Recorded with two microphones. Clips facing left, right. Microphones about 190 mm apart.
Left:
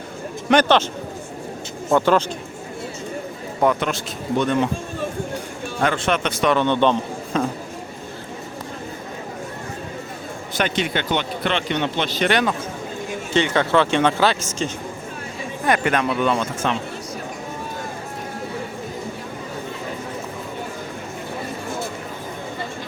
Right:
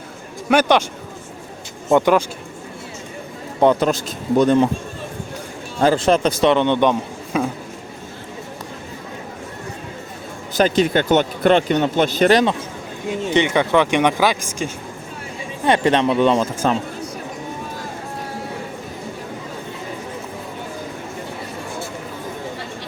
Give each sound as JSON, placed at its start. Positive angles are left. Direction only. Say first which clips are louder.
{"t": 0.4, "sound": "speech", "louder": "right 1 dB", "side_deg": -10}
{"t": 1.9, "sound": "speech", "louder": "right 2 dB", "side_deg": -15}
{"t": 3.6, "sound": "speech", "louder": "right 5 dB", "side_deg": -30}
{"t": 5.8, "sound": "speech", "louder": "right 6 dB", "side_deg": -35}
{"t": 6.5, "sound": "speech", "louder": "left 1 dB", "side_deg": -20}
{"t": 10.6, "sound": "speech", "louder": "right 7 dB", "side_deg": -40}
{"t": 13.3, "sound": "speech", "louder": "right 1 dB", "side_deg": -15}
{"t": 15.6, "sound": "speech", "louder": "right 4 dB", "side_deg": -30}